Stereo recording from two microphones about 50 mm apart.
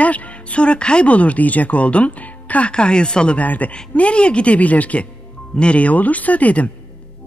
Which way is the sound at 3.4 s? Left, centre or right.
Left.